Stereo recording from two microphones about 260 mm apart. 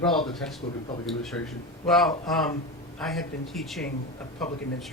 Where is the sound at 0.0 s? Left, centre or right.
Centre.